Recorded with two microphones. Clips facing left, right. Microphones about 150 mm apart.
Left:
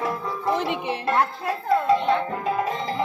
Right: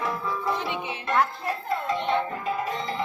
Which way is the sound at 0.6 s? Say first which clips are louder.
Left 5 dB; 90° left.